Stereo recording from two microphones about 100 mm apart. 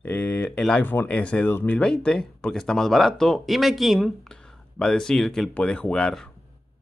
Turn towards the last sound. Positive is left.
turn(degrees=5)  # may be behind; listen again after turning